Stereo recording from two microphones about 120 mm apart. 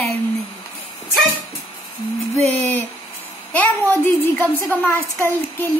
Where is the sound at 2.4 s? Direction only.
15° left (ahead or behind).